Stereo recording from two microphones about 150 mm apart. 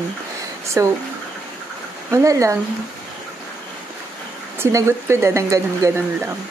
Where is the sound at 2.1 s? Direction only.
20° right (ahead or behind).